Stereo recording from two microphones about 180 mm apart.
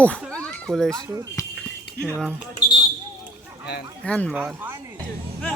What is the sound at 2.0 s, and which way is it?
Speech, 5° left (ahead or behind).